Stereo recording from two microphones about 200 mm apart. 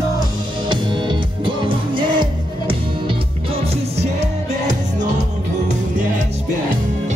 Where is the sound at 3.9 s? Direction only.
35° right (ahead or behind).